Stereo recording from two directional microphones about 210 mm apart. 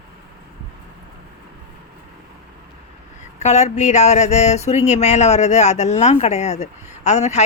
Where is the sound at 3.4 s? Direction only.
30° left (ahead or behind).